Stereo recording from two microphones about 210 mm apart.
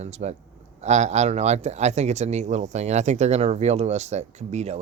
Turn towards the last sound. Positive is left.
turn(degrees=-30)  # may be behind; listen again after turning